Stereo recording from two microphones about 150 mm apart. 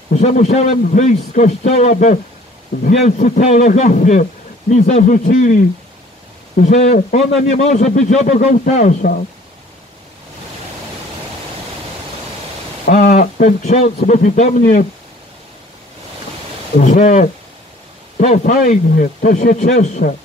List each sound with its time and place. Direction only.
0.1 s a man's voice: 55° left (ahead or behind)
12.9 s a man's voice: 50° left (ahead or behind)
16.8 s a man's voice: 55° left (ahead or behind)